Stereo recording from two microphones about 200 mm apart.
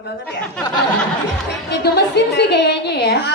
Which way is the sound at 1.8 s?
55° left (ahead or behind).